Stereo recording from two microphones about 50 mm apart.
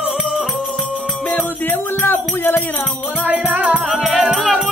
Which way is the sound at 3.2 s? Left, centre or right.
Right.